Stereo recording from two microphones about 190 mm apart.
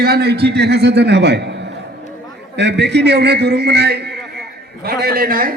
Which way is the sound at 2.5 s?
65° right (ahead or behind).